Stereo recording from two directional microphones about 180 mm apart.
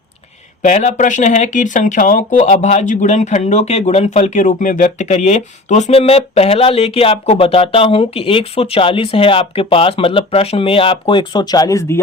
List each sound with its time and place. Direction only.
0.6 s speech: 40° left (ahead or behind); by 11.9 s 15° left (ahead or behind)